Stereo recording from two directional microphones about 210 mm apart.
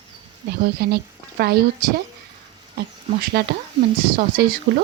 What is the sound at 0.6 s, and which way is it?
Speech, 50° right (ahead or behind).